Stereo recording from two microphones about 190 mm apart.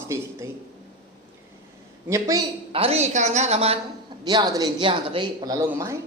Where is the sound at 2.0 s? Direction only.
15° right (ahead or behind).